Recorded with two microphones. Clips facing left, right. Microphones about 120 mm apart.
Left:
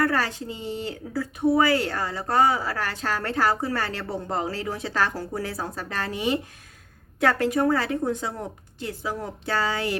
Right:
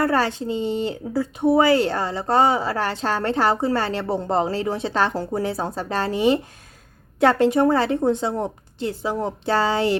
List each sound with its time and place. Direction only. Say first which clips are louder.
0.0 s speech: right 4 dB; 25° right (ahead or behind)